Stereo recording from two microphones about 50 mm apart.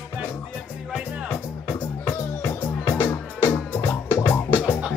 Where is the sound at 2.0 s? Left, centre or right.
Left.